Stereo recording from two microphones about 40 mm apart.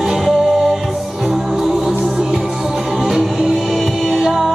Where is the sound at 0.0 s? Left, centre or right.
Centre.